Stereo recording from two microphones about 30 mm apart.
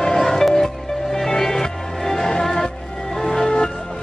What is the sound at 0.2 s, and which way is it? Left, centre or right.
Music, centre.